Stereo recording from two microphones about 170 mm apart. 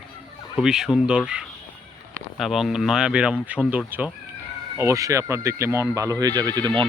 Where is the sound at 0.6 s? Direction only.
5° right (ahead or behind).